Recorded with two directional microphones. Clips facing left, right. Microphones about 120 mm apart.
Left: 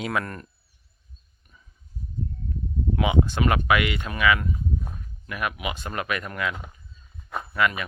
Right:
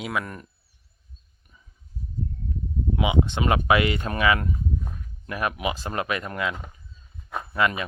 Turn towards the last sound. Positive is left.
turn(degrees=-25)  # may be behind; listen again after turning